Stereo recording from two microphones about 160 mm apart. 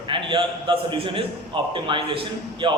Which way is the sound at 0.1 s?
30° right (ahead or behind).